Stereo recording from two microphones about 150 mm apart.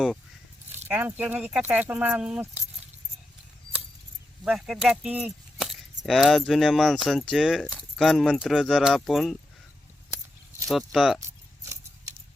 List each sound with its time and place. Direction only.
0.9 s speech: 10° right (ahead or behind)
4.4 s speech: 5° right (ahead or behind)
10.7 s speech: centre (ahead or behind)
11.3 s keys jangling: 20° right (ahead or behind)